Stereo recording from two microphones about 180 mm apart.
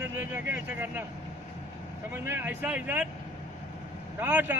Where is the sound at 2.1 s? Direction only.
10° right (ahead or behind).